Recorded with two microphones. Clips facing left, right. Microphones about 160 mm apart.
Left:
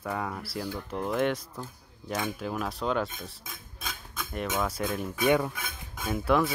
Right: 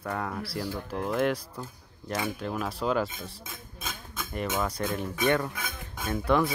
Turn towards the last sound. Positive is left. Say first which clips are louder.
# even
turn(degrees=0)  # may be behind; listen again after turning